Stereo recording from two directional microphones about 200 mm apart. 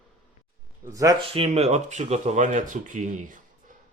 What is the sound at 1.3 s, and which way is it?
Speech, 30° right (ahead or behind).